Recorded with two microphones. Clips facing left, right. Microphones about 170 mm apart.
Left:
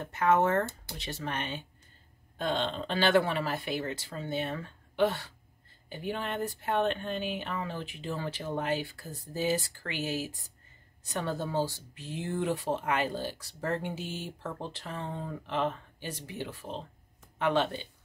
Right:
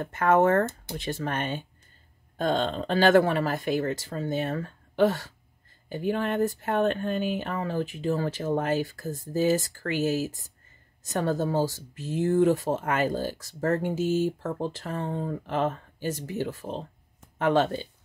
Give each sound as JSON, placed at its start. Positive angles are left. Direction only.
{"t": 0.0, "sound": "speech", "side_deg": -50}